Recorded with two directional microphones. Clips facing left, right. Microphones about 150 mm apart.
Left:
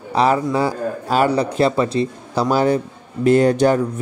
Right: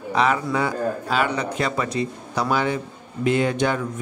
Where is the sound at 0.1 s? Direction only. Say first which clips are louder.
Left 4 dB; 35° left (ahead or behind).